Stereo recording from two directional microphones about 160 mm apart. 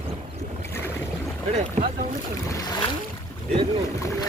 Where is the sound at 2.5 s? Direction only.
30° left (ahead or behind).